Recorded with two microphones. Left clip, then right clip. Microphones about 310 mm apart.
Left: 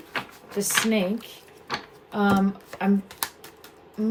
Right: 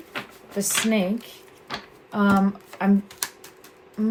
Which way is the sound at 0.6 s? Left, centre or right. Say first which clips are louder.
Even; centre.